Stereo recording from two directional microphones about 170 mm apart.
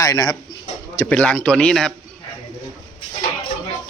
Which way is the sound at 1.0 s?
10° left (ahead or behind).